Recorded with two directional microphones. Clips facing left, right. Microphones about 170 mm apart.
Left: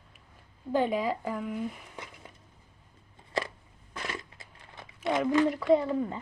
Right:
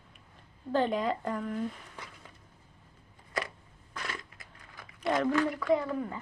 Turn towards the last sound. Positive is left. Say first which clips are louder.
# left 4 dB
turn(degrees=25)  # may be behind; listen again after turning